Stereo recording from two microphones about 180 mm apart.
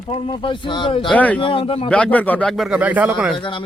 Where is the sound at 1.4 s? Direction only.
30° left (ahead or behind).